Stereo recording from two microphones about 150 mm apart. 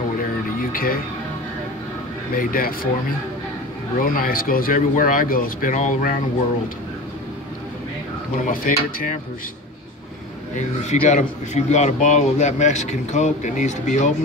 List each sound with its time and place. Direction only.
0.6 s a sound: 75° left (ahead or behind)
2.3 s speech: 70° left (ahead or behind)
4.0 s speech: 70° left (ahead or behind)
8.5 s speech: 65° left (ahead or behind)
10.8 s a man's voice: 50° left (ahead or behind)